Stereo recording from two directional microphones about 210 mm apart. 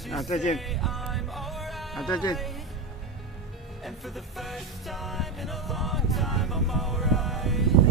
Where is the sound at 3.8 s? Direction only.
Centre (ahead or behind).